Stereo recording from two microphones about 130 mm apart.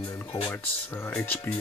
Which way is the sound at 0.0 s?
15° left (ahead or behind).